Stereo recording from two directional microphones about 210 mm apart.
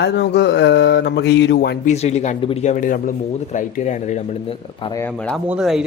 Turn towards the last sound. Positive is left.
turn(degrees=-5)  # may be behind; listen again after turning